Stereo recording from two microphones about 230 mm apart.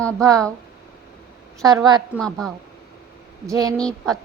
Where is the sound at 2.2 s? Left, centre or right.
Centre.